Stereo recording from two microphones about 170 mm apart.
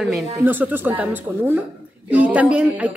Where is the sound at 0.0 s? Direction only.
5° right (ahead or behind).